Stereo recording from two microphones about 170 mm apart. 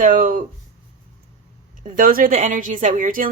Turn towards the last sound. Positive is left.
turn(degrees=-55)  # may be behind; listen again after turning